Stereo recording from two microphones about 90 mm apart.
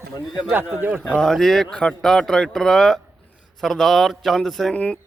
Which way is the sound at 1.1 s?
5° left (ahead or behind).